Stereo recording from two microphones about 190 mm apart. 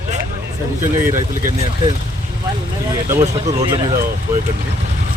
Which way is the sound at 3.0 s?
15° right (ahead or behind).